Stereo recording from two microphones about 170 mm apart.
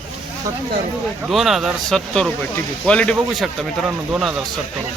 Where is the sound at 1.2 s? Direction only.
Centre (ahead or behind).